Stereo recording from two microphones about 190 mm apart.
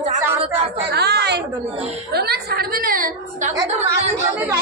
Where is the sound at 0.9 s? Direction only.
60° right (ahead or behind); by 3.5 s 45° right (ahead or behind).